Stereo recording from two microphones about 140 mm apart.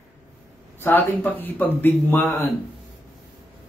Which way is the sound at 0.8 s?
15° left (ahead or behind).